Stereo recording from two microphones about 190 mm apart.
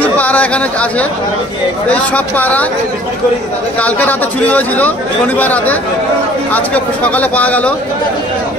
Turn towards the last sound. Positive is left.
turn(degrees=10)  # may be behind; listen again after turning